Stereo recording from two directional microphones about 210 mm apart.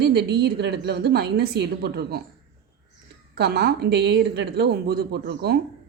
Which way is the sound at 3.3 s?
50° right (ahead or behind).